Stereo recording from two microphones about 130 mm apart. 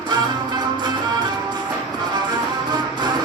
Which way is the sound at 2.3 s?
35° right (ahead or behind).